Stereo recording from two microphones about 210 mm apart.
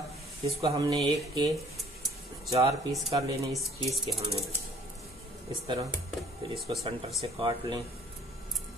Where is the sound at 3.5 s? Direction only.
Centre (ahead or behind).